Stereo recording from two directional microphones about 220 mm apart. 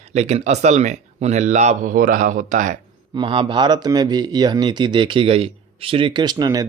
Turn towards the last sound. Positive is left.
turn(degrees=-20)  # may be behind; listen again after turning